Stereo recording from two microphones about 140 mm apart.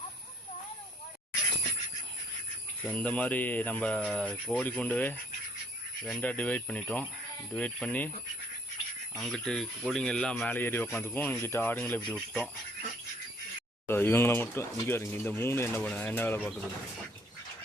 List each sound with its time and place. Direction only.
2.8 s speech: 10° left (ahead or behind)
9.1 s speech: 5° left (ahead or behind)
13.8 s speech: 15° left (ahead or behind)